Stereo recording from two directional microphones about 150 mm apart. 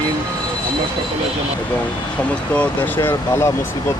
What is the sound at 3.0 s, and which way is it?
Speech, 15° left (ahead or behind).